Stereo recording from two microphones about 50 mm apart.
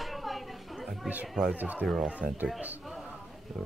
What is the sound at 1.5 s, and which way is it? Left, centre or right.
Speech, right.